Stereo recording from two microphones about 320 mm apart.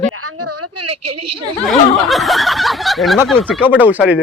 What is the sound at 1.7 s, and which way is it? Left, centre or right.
Speech, centre.